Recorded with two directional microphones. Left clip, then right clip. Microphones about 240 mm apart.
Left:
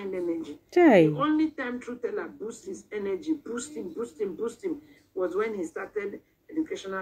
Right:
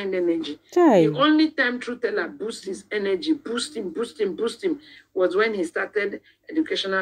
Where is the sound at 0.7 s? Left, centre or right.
Right.